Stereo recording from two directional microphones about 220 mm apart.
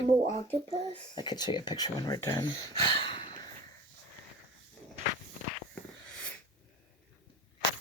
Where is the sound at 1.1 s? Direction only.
20° left (ahead or behind).